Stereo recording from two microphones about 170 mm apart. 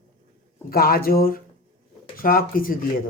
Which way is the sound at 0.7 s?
60° left (ahead or behind).